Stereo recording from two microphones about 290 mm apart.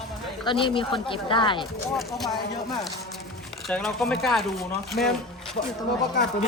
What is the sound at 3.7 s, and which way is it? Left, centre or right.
Speech, centre.